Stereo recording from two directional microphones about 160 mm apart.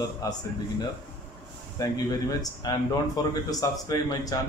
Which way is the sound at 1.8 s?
25° left (ahead or behind).